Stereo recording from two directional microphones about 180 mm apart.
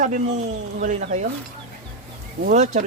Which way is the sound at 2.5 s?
45° right (ahead or behind).